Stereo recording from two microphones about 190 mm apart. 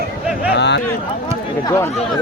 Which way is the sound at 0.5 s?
65° left (ahead or behind).